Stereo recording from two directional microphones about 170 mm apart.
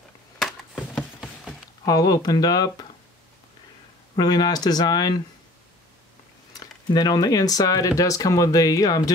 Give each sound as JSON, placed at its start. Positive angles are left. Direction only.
{"t": 1.9, "sound": "speech", "side_deg": 20}
{"t": 4.2, "sound": "speech", "side_deg": 25}
{"t": 6.5, "sound": "speech", "side_deg": 25}